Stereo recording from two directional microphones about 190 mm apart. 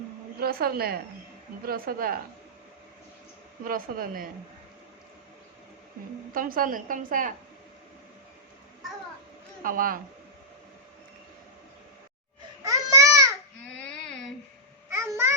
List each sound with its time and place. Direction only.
0.3 s a woman's voice: 55° right (ahead or behind)
3.6 s a woman's voice: 50° right (ahead or behind)
6.3 s a woman's voice: 50° right (ahead or behind)
9.6 s a woman's voice: 45° right (ahead or behind)
12.6 s babbling: 15° right (ahead or behind)
13.9 s a sound: 5° left (ahead or behind)
14.8 s babbling: 15° right (ahead or behind)